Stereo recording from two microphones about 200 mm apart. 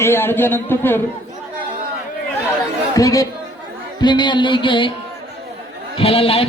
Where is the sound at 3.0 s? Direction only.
15° left (ahead or behind).